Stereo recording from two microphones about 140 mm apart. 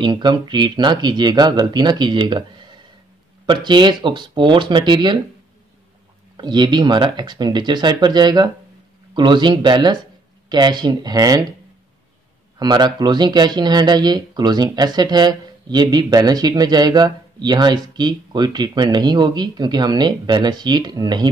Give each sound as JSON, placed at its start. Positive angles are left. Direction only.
{"t": 0.0, "sound": "speech", "side_deg": -35}
{"t": 3.4, "sound": "speech", "side_deg": -35}
{"t": 6.3, "sound": "speech", "side_deg": -35}
{"t": 12.5, "sound": "speech", "side_deg": -30}